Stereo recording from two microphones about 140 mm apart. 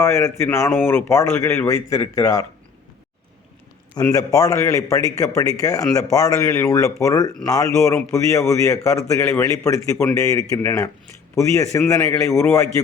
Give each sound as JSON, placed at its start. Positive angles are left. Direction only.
{"t": 0.0, "sound": "a man's voice", "side_deg": 15}
{"t": 4.1, "sound": "a man's voice", "side_deg": 25}